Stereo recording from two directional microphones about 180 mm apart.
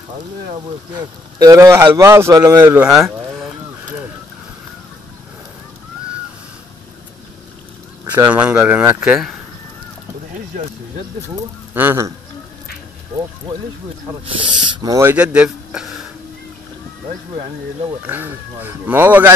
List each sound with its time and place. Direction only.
0.9 s a man's voice: 20° right (ahead or behind)
2.8 s speech: 5° right (ahead or behind)
8.3 s speech: 5° right (ahead or behind)
11.7 s speech: 10° right (ahead or behind)
14.2 s speech: 25° right (ahead or behind); by 16.0 s 5° right (ahead or behind)
18.0 s speech: 10° right (ahead or behind)